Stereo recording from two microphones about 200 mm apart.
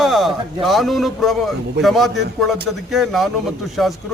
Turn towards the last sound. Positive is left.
turn(degrees=0)  # may be behind; listen again after turning